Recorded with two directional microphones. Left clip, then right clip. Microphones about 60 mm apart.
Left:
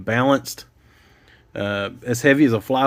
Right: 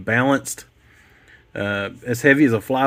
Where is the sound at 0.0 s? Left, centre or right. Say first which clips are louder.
Even; right.